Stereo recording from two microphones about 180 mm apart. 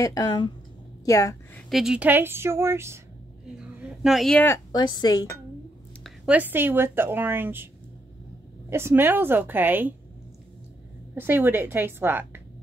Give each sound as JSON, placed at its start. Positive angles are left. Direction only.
{"t": 0.0, "sound": "a woman's voice", "side_deg": 20}
{"t": 1.7, "sound": "speech", "side_deg": -5}
{"t": 3.5, "sound": "a sound", "side_deg": -5}
{"t": 4.5, "sound": "a woman's voice", "side_deg": 25}
{"t": 6.0, "sound": "speech", "side_deg": -5}
{"t": 8.6, "sound": "speech", "side_deg": -15}
{"t": 11.1, "sound": "speech", "side_deg": -10}